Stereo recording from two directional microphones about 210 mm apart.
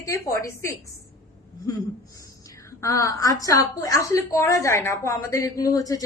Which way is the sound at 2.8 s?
15° left (ahead or behind).